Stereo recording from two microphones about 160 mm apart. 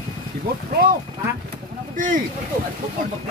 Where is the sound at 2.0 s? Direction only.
55° right (ahead or behind).